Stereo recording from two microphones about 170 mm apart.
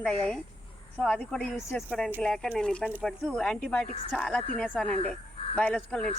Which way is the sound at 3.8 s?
35° left (ahead or behind).